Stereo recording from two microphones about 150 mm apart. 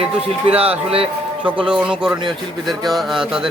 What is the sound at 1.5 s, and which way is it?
A man's voice, 5° right (ahead or behind).